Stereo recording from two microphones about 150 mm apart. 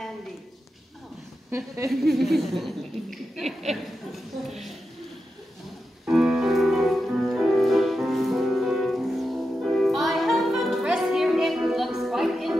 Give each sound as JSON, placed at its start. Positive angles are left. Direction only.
{"t": 1.5, "sound": "a woman's voice", "side_deg": -15}
{"t": 1.9, "sound": "speech", "side_deg": 0}
{"t": 6.0, "sound": "music", "side_deg": -5}